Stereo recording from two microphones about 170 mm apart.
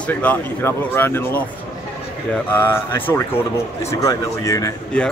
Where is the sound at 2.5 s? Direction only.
15° left (ahead or behind).